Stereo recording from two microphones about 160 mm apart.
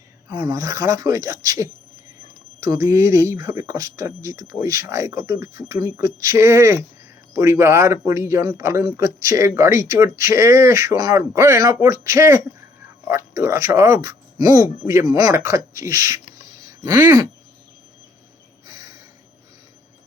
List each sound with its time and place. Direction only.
0.3 s speech: 25° right (ahead or behind)
2.6 s speech: 15° right (ahead or behind)